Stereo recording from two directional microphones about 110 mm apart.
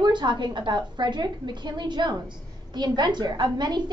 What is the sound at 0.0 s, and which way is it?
A woman's voice, 45° right (ahead or behind).